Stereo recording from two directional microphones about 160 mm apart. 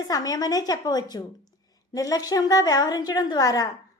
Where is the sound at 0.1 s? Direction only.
25° left (ahead or behind).